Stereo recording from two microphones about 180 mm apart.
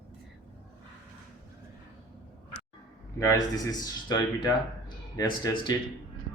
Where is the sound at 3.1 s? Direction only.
15° left (ahead or behind).